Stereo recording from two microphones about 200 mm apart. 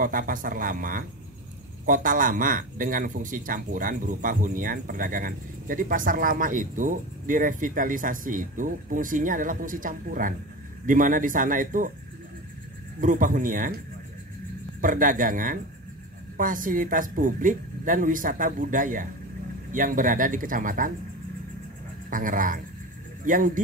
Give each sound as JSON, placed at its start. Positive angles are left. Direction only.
{"t": 0.0, "sound": "a man's voice", "side_deg": -45}
{"t": 13.0, "sound": "speech", "side_deg": -40}
{"t": 14.8, "sound": "a man's voice", "side_deg": -40}
{"t": 22.1, "sound": "a man's voice", "side_deg": -40}